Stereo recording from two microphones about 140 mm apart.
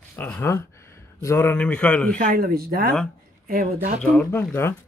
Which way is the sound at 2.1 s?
80° right.